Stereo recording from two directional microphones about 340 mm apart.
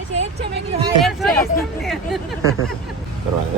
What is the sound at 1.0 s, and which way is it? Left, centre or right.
Speech, centre.